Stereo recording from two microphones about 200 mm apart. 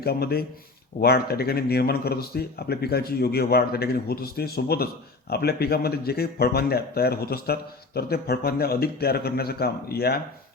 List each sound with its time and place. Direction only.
0.0 s speech: 50° left (ahead or behind)